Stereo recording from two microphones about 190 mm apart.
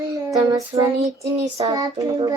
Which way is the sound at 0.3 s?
20° right (ahead or behind).